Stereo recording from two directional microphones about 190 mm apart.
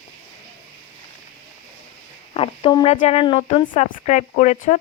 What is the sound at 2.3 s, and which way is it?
Speech, 30° left (ahead or behind).